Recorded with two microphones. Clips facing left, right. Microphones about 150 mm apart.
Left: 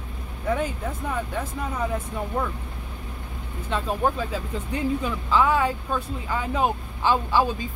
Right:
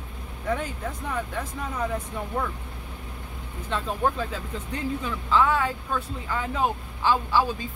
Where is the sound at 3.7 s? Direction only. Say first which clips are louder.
Left 2 dB; 10° left (ahead or behind).